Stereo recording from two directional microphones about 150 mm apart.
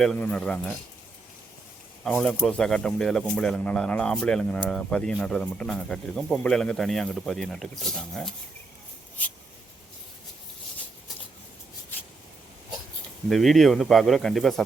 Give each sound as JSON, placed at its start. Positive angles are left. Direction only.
{"t": 0.0, "sound": "speech", "side_deg": 5}
{"t": 2.0, "sound": "speech", "side_deg": 5}
{"t": 13.3, "sound": "speech", "side_deg": 0}